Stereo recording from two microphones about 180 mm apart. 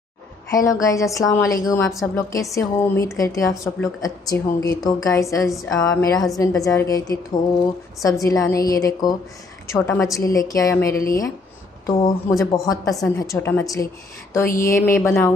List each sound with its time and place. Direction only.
0.7 s a woman's voice: 20° left (ahead or behind)